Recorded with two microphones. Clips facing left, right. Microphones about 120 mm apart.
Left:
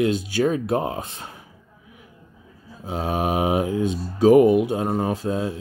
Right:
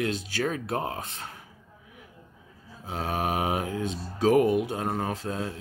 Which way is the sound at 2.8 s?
15° left (ahead or behind).